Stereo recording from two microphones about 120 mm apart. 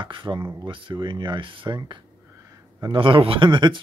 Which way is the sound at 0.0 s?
45° right (ahead or behind).